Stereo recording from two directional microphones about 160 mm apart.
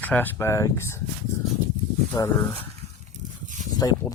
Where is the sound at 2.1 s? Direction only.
20° left (ahead or behind).